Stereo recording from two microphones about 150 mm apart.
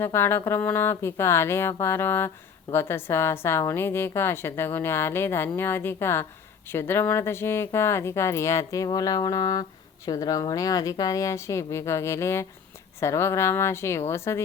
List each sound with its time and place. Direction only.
0.0 s a woman's voice: 15° left (ahead or behind)